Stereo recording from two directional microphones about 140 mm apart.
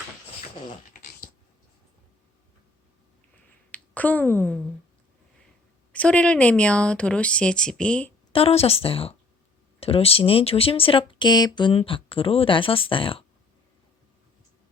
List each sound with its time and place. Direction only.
0.9 s a sound: 65° left (ahead or behind)
3.7 s speech: 10° left (ahead or behind)
5.9 s speech: 10° left (ahead or behind)
8.3 s a woman's voice: 45° left (ahead or behind)